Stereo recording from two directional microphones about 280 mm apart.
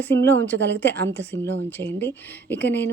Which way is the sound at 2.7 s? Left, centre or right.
Left.